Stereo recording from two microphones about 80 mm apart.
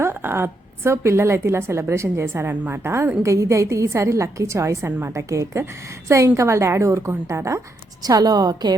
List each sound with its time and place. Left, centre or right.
0.0 s a woman's voice: right
8.0 s a woman's voice: right